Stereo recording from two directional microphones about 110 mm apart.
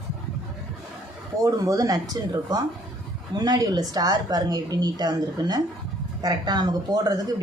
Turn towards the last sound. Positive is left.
turn(degrees=-35)  # may be behind; listen again after turning